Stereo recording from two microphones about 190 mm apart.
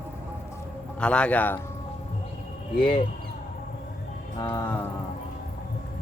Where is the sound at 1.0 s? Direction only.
5° left (ahead or behind).